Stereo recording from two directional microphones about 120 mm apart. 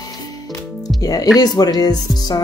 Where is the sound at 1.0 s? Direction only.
30° left (ahead or behind).